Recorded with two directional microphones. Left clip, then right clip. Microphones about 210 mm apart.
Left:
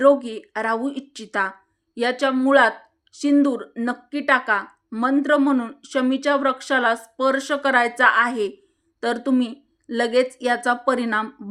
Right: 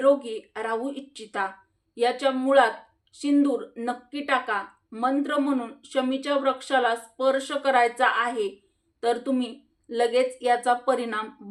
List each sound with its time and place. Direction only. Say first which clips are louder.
0.0 s speech: left 5 dB; 45° left (ahead or behind)